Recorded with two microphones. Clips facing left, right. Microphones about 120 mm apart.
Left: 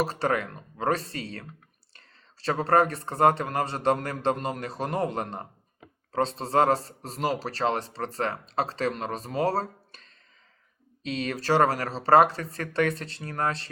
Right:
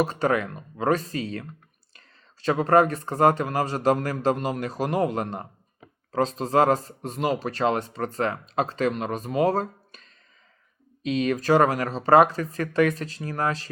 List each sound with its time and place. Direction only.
0.0 s speech: 35° left (ahead or behind)
1.9 s clicking: 35° left (ahead or behind)
2.6 s speech: 35° left (ahead or behind)